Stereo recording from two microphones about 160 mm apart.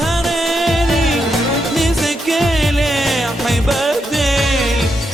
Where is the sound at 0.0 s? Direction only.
Centre (ahead or behind).